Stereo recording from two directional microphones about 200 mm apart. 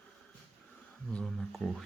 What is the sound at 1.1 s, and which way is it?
Speech, 5° left (ahead or behind).